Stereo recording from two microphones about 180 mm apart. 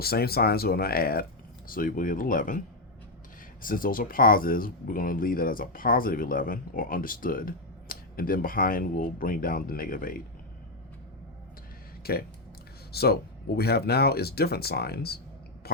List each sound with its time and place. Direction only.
0.0 s speech: 60° left (ahead or behind)
3.6 s speech: 50° left (ahead or behind)
12.0 s speech: 55° left (ahead or behind)